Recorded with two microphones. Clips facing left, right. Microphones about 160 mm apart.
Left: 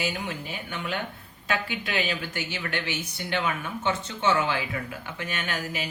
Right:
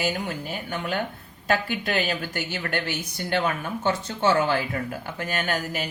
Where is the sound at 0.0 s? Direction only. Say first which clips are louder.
Right 3 dB; 45° right (ahead or behind).